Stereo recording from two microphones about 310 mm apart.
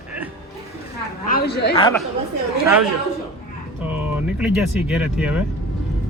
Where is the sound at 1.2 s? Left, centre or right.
Left.